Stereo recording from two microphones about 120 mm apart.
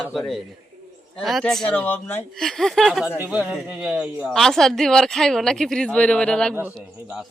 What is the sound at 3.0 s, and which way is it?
A man's voice, 15° right (ahead or behind).